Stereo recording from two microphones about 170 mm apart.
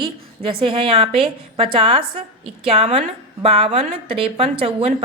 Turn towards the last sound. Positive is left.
turn(degrees=-35)  # may be behind; listen again after turning